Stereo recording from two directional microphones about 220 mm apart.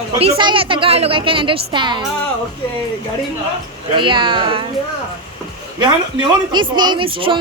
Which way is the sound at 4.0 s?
20° right (ahead or behind).